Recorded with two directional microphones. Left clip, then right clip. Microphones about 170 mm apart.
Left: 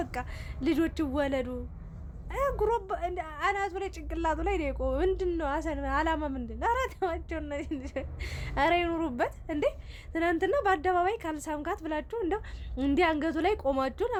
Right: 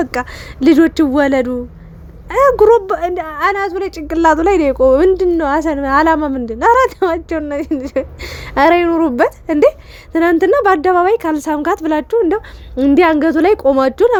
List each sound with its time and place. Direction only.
0.0 s a woman's voice: 40° right (ahead or behind)